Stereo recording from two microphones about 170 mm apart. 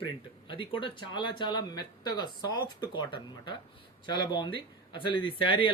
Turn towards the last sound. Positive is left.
turn(degrees=30)  # may be behind; listen again after turning